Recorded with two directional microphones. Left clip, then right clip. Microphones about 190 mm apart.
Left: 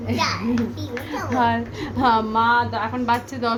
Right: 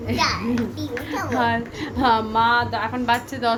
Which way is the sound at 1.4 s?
20° left (ahead or behind).